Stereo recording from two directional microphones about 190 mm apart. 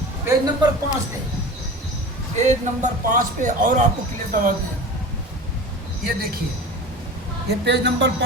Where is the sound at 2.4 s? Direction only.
40° right (ahead or behind).